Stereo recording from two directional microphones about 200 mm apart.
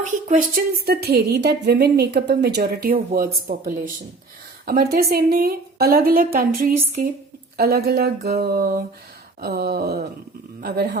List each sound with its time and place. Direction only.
0.3 s a woman's voice: 45° right (ahead or behind)